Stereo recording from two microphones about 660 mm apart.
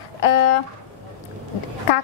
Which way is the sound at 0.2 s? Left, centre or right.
Left.